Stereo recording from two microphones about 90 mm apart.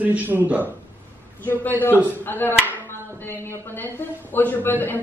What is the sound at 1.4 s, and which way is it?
A woman's voice, 20° left (ahead or behind).